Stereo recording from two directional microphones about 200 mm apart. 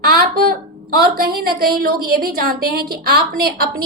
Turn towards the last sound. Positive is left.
turn(degrees=-50)  # may be behind; listen again after turning